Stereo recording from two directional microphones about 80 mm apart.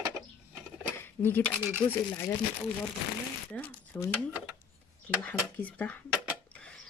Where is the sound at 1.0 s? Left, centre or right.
Left.